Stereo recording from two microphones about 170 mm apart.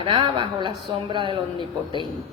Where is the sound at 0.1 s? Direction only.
30° right (ahead or behind).